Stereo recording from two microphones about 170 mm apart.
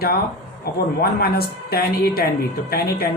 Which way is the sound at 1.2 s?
65° left (ahead or behind).